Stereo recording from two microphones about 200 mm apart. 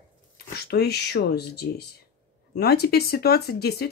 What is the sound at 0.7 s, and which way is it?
Speech, 55° left (ahead or behind).